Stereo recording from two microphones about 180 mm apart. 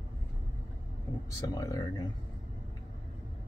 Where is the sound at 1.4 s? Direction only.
20° left (ahead or behind).